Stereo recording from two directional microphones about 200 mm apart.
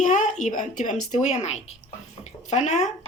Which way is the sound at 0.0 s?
40° left (ahead or behind).